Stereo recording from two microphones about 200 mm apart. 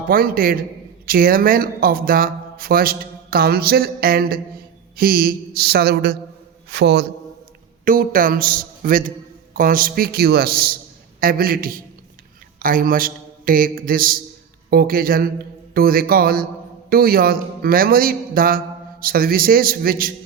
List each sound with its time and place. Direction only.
0.1 s a man's voice: 45° right (ahead or behind)
7.9 s a man's voice: 45° right (ahead or behind)